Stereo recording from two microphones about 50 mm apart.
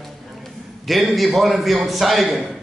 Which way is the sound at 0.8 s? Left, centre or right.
Centre.